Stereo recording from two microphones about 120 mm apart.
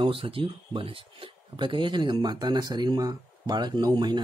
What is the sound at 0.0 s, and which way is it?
Speech, 50° right (ahead or behind).